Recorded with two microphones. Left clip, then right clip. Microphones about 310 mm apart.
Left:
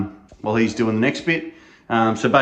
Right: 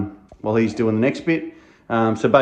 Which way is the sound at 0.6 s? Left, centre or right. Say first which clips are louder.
Right 1 dB; right.